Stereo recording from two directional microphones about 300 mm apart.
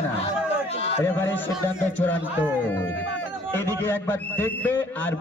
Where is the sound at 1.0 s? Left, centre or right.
Centre.